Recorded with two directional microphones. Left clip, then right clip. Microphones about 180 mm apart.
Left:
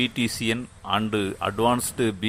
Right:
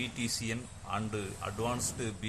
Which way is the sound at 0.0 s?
30° left (ahead or behind).